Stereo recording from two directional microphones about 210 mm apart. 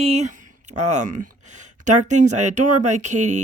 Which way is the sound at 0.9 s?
35° right (ahead or behind).